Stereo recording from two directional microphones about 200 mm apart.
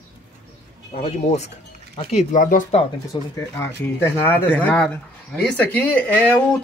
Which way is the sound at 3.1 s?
25° left (ahead or behind).